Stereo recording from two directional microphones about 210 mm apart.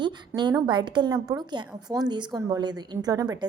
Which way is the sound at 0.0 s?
20° right (ahead or behind).